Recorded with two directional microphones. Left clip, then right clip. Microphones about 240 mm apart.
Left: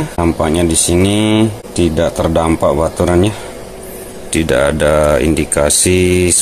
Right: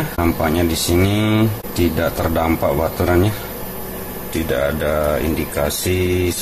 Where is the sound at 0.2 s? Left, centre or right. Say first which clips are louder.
Left 4 dB; left.